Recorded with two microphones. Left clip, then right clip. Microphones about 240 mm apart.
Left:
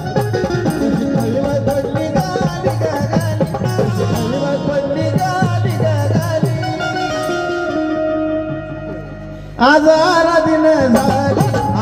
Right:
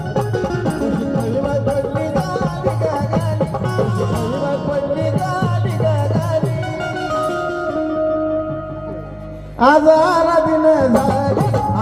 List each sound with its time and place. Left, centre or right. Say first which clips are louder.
0.1 s music: left 3 dB; left
9.6 s music: left 1 dB; left